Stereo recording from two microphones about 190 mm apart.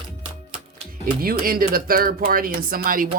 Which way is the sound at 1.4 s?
50° right (ahead or behind).